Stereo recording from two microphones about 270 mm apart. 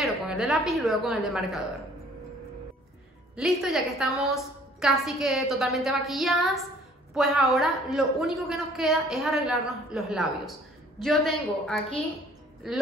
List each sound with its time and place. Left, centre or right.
0.0 s a woman's voice: centre
3.3 s a woman's voice: centre